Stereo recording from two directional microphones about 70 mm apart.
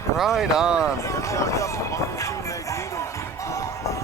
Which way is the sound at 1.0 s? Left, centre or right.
Left.